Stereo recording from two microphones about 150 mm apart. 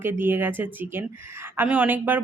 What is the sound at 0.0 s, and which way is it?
A woman's voice, 15° right (ahead or behind).